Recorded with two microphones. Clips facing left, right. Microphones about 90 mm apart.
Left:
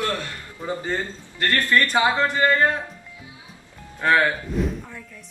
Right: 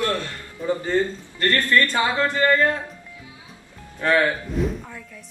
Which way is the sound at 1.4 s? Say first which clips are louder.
Right 1 dB; 20° left (ahead or behind).